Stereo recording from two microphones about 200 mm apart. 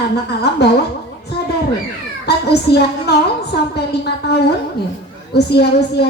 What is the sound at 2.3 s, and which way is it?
Speech, 55° left (ahead or behind).